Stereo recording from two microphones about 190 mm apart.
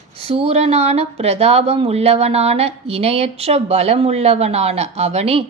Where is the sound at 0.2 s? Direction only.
30° right (ahead or behind).